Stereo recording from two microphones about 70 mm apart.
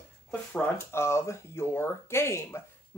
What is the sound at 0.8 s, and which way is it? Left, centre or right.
Speech, left.